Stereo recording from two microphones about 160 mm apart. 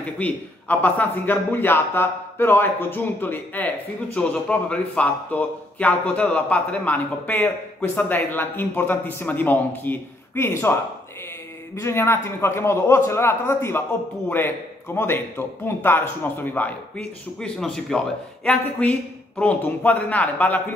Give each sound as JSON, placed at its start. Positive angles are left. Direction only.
{"t": 0.2, "sound": "a man's voice", "side_deg": 10}
{"t": 11.7, "sound": "a man's voice", "side_deg": 15}
{"t": 15.0, "sound": "a man's voice", "side_deg": 15}